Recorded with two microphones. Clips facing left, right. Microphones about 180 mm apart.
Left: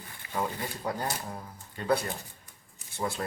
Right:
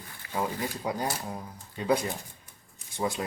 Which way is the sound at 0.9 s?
15° right (ahead or behind).